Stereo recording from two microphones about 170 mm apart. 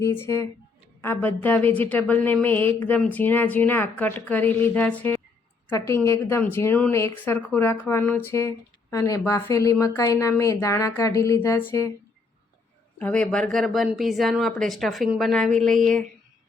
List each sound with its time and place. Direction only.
0.0 s a woman's voice: 15° left (ahead or behind)
13.0 s speech: 5° left (ahead or behind)